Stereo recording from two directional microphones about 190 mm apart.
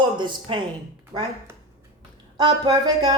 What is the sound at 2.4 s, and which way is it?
Speech, 20° right (ahead or behind).